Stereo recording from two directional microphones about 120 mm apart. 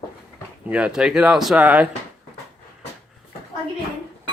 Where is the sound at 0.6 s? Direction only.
10° right (ahead or behind).